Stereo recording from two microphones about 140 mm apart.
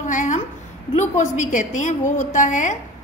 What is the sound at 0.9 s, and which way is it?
A woman's voice, 60° left (ahead or behind).